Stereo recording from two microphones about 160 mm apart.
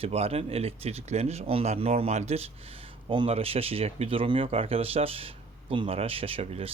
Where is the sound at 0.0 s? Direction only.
40° right (ahead or behind).